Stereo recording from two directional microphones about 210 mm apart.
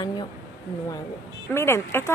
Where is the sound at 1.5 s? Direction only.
10° left (ahead or behind).